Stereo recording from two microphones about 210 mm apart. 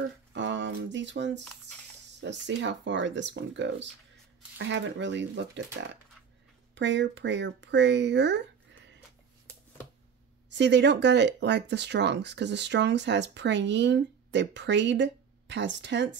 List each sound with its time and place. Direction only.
0.3 s speech: 60° right (ahead or behind)
6.7 s speech: 60° right (ahead or behind)
10.5 s speech: 55° right (ahead or behind)